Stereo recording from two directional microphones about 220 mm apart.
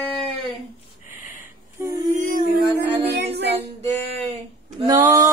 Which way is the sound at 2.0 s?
40° right (ahead or behind).